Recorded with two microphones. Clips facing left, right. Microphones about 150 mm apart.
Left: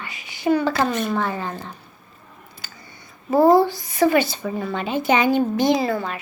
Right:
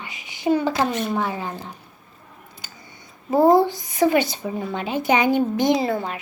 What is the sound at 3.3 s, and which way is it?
A woman's voice, 15° right (ahead or behind).